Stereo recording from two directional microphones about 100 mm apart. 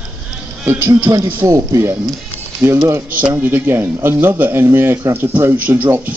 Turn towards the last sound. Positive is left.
turn(degrees=-25)  # may be behind; listen again after turning